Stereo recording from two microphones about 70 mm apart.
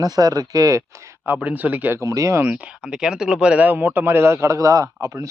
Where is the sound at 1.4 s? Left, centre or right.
Right.